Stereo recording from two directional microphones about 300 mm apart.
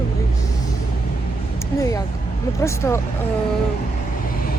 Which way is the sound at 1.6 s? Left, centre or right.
Centre.